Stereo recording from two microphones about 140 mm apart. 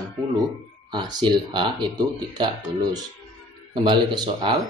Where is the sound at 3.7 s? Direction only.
35° right (ahead or behind).